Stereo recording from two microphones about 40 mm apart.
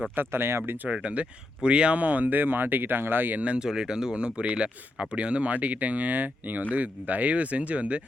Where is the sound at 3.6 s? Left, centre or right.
Centre; by 8.0 s right.